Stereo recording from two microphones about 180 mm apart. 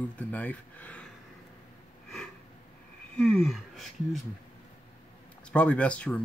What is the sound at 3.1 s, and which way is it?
Speech, 5° left (ahead or behind).